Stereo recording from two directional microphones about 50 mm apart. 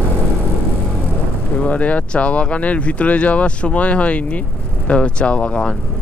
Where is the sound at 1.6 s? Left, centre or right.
Left.